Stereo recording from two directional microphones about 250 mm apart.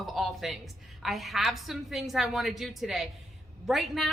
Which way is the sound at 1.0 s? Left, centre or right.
Centre.